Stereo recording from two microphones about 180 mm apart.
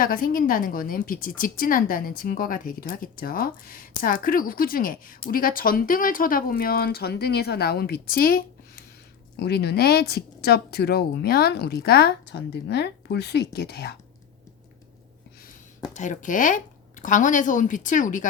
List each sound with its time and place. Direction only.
0.0 s a woman's voice: 50° left (ahead or behind)
16.0 s a woman's voice: 45° left (ahead or behind)